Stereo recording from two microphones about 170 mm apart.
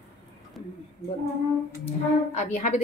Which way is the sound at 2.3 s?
45° left (ahead or behind).